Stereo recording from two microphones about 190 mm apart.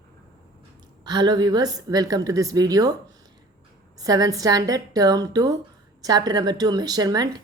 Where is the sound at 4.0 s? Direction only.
20° right (ahead or behind).